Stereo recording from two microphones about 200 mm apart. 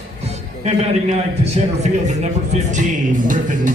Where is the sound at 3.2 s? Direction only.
40° right (ahead or behind).